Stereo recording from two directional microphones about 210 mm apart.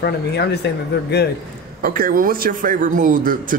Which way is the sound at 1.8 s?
45° right (ahead or behind).